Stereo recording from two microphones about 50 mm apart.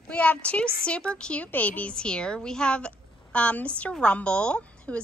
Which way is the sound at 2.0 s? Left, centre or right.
Centre.